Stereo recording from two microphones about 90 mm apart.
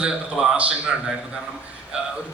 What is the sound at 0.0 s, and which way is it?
A man's voice, 10° right (ahead or behind).